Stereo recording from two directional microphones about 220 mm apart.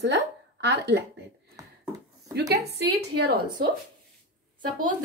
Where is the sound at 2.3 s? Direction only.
50° right (ahead or behind).